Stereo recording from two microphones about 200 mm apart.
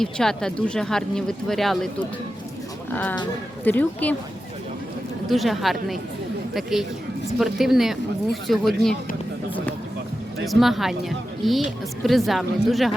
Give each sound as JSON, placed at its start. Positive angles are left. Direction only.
{"t": 0.0, "sound": "speech", "side_deg": 0}
{"t": 5.3, "sound": "speech", "side_deg": 0}
{"t": 10.4, "sound": "speech", "side_deg": 0}